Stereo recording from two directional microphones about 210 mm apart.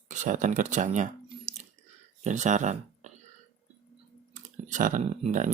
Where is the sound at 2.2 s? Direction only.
35° right (ahead or behind).